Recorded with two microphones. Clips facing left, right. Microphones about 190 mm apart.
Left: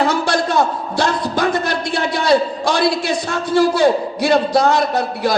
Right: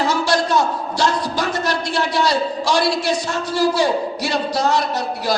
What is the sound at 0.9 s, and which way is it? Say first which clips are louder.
A man's voice: left 2 dB; 55° left (ahead or behind).